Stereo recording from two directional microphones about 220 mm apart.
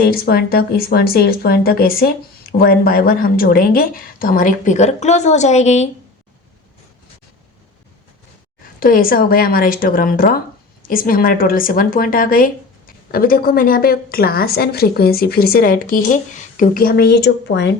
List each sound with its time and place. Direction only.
0.0 s speech: 45° left (ahead or behind)
8.8 s a woman's voice: 40° left (ahead or behind)